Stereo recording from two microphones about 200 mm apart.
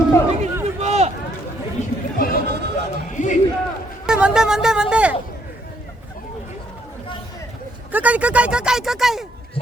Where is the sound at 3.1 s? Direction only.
40° left (ahead or behind).